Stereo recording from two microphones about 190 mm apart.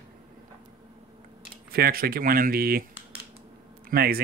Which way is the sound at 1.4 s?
55° right (ahead or behind).